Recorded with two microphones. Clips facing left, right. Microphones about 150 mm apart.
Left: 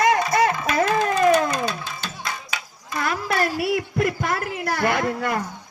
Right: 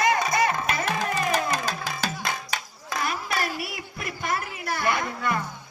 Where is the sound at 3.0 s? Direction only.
85° left.